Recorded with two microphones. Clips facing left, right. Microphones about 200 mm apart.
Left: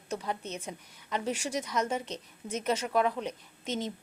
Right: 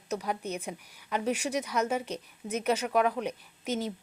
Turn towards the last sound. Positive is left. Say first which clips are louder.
# right 2 dB
turn(degrees=-10)  # may be behind; listen again after turning